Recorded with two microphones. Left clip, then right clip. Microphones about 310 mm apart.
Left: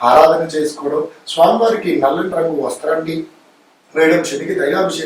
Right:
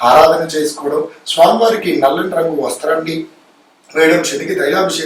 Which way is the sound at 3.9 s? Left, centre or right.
Centre.